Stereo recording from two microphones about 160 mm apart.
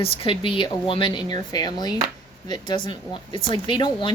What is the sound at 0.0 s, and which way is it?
Speech, 35° left (ahead or behind).